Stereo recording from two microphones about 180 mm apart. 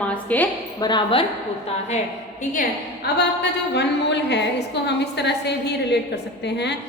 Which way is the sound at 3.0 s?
70° left (ahead or behind).